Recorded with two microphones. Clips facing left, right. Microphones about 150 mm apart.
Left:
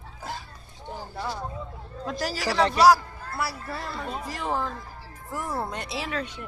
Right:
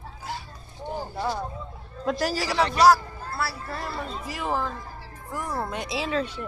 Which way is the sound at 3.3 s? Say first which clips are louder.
Even; 15° left (ahead or behind).